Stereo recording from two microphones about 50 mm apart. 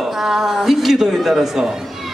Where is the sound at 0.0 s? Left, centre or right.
Centre.